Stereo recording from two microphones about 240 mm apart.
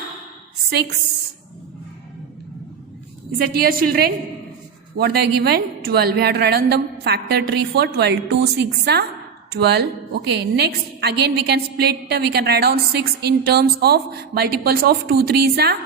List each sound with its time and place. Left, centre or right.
3.3 s a woman's voice: right